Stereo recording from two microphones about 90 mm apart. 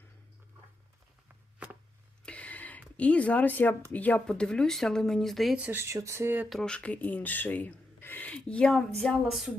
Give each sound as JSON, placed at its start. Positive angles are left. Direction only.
{"t": 2.2, "sound": "a sound", "side_deg": 15}
{"t": 3.0, "sound": "speech", "side_deg": 15}
{"t": 5.7, "sound": "speech", "side_deg": -35}
{"t": 6.5, "sound": "speech", "side_deg": 5}